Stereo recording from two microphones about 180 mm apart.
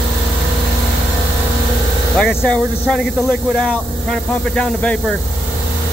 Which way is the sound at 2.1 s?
5° left (ahead or behind).